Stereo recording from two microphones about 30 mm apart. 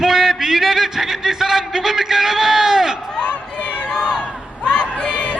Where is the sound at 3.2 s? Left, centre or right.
Left.